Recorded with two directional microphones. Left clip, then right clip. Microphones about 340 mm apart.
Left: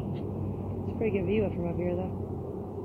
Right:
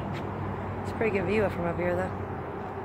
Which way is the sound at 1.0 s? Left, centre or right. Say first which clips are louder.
Right 2 dB; right.